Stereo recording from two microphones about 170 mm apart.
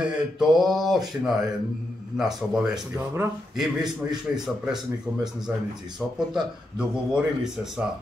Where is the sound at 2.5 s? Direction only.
5° right (ahead or behind).